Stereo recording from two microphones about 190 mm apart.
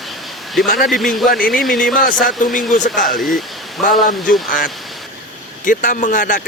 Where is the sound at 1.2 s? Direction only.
50° left (ahead or behind).